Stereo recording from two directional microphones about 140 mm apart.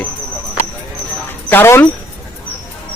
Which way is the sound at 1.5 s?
15° left (ahead or behind).